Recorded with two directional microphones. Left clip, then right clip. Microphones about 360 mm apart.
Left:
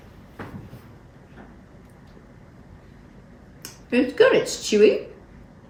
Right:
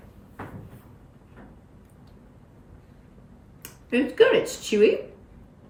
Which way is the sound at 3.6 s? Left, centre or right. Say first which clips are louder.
Left 3 dB; centre.